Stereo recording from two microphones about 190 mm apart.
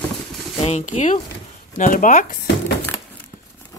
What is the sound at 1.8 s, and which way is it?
Speech, 45° left (ahead or behind).